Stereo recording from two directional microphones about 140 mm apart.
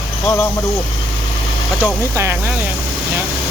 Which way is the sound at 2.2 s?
20° right (ahead or behind).